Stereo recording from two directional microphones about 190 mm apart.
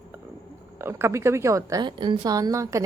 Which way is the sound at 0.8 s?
10° right (ahead or behind).